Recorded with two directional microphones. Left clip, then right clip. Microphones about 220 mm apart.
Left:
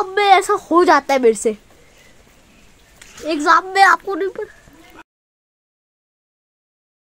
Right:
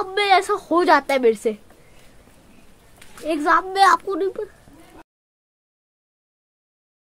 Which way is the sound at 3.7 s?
30° left (ahead or behind).